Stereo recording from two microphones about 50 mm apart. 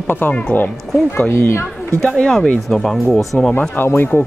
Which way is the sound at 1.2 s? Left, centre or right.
Left.